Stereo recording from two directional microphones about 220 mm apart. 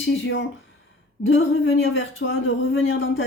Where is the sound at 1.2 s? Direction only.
60° left (ahead or behind).